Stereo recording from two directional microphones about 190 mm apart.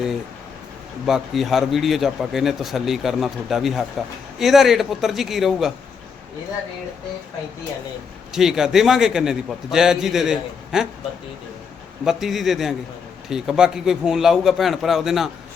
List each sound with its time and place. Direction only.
1.0 s speech: centre (ahead or behind)
8.3 s speech: centre (ahead or behind)
12.0 s speech: centre (ahead or behind)